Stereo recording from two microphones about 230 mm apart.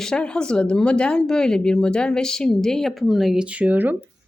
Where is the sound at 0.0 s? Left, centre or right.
Centre.